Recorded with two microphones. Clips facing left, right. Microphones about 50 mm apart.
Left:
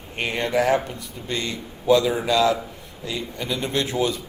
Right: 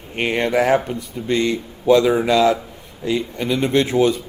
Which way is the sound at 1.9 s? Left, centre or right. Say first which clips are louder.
Right 4 dB; right.